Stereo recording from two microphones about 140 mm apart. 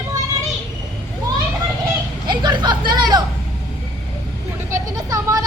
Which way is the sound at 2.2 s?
35° right (ahead or behind).